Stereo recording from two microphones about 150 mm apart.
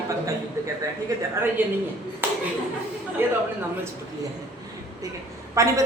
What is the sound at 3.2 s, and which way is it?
Speech, 15° right (ahead or behind).